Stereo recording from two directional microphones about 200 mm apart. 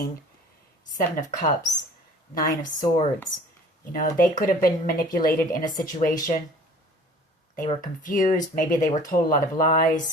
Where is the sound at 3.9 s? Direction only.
45° left (ahead or behind).